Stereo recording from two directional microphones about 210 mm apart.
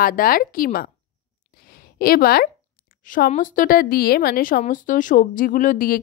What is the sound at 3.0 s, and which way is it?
Speech, 40° left (ahead or behind).